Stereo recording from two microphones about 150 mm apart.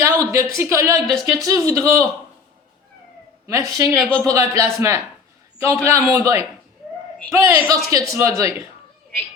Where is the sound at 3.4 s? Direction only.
20° right (ahead or behind).